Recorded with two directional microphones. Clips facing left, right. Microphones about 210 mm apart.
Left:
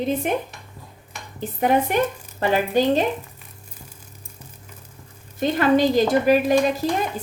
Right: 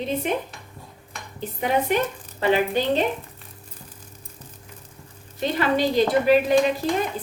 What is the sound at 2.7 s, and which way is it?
Speech, 45° left (ahead or behind).